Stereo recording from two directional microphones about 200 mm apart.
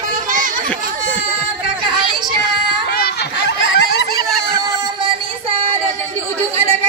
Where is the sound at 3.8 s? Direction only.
60° left (ahead or behind).